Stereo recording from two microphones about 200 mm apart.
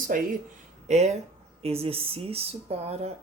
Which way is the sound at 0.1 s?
45° right (ahead or behind).